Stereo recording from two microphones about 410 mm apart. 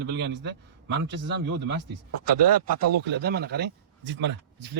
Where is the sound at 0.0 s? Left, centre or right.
Right.